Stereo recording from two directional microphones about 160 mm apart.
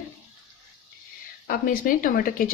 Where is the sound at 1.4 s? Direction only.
60° left (ahead or behind).